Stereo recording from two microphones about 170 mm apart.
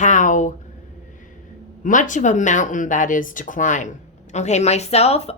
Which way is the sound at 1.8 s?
50° left (ahead or behind).